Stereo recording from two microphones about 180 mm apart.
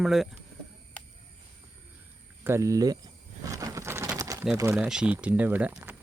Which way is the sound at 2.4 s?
15° right (ahead or behind).